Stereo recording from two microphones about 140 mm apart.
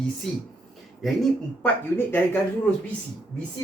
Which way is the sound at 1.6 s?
15° left (ahead or behind).